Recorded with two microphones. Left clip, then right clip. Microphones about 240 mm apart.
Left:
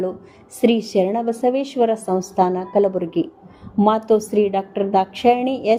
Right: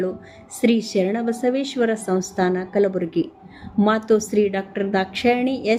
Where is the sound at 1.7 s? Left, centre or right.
Right.